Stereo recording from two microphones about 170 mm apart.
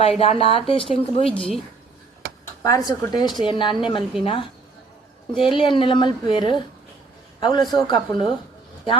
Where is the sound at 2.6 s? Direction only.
20° left (ahead or behind).